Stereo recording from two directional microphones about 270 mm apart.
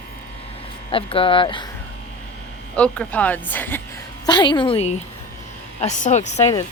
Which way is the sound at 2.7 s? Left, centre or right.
Centre.